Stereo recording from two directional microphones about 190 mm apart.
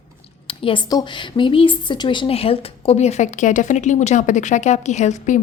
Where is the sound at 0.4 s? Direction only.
25° left (ahead or behind).